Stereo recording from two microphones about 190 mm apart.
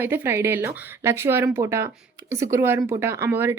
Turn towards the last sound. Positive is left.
turn(degrees=-10)  # may be behind; listen again after turning